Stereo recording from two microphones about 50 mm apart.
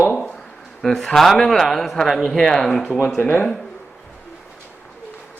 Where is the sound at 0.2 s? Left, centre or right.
Centre.